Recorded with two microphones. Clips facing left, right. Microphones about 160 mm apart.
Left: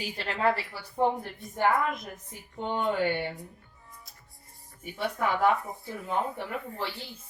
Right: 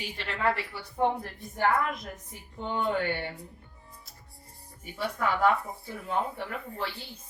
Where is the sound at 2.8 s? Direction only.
15° left (ahead or behind).